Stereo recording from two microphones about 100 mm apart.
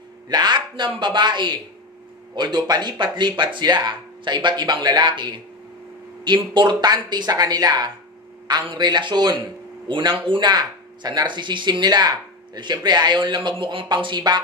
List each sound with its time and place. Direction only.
0.3 s speech: 45° right (ahead or behind)
10.5 s speech: 45° right (ahead or behind)